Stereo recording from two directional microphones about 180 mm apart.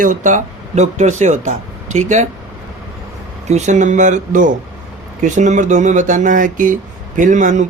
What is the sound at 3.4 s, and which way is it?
Speech, 40° right (ahead or behind).